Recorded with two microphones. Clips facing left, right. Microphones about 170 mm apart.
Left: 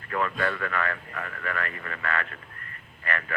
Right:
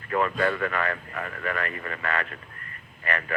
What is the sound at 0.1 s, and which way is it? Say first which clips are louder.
Speech: right 3 dB; 25° right (ahead or behind).